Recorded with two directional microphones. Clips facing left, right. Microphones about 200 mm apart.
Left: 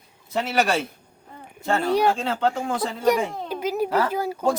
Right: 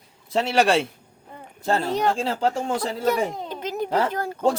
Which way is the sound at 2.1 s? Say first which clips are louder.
Even; 35° right (ahead or behind).